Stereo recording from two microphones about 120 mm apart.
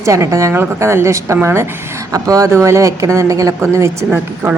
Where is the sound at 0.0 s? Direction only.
25° right (ahead or behind).